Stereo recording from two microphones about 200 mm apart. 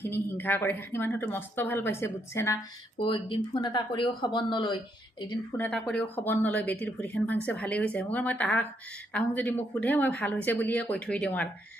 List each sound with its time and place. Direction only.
0.0 s speech: 10° left (ahead or behind)
3.0 s speech: 25° left (ahead or behind)
5.5 s speech: 5° left (ahead or behind)